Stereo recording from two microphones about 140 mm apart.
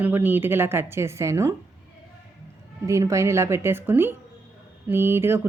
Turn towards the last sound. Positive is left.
turn(degrees=-15)  # may be behind; listen again after turning